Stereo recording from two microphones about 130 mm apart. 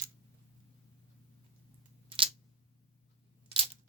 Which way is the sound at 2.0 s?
40° right (ahead or behind).